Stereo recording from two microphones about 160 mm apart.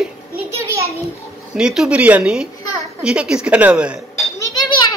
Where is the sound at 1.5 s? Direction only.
5° right (ahead or behind).